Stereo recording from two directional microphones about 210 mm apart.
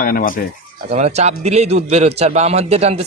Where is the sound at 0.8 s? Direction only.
30° right (ahead or behind).